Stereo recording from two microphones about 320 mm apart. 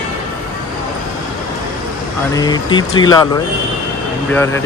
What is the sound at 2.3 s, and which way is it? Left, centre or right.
Speech, centre.